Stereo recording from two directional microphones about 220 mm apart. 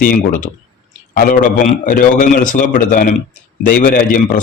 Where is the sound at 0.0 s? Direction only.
40° left (ahead or behind).